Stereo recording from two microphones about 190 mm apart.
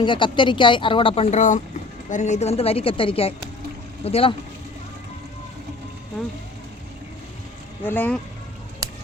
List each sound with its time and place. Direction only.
0.0 s speech: 25° left (ahead or behind)
7.9 s speech: 10° left (ahead or behind)